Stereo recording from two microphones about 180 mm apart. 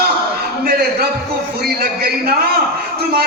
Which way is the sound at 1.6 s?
60° right (ahead or behind).